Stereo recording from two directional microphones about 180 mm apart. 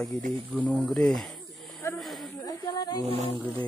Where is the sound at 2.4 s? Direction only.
20° left (ahead or behind).